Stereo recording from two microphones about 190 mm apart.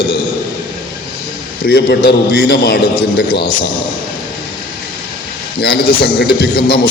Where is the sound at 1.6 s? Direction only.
60° left (ahead or behind).